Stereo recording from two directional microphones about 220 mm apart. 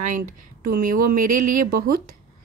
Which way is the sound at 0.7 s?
40° right (ahead or behind).